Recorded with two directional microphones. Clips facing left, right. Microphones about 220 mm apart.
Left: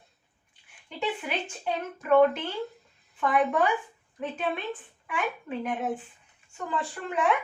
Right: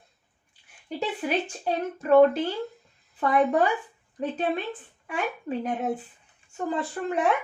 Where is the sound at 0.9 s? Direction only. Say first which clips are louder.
Right 3 dB; 40° right (ahead or behind).